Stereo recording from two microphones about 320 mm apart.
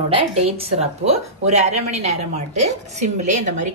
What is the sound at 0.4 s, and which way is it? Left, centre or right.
A woman's voice, centre.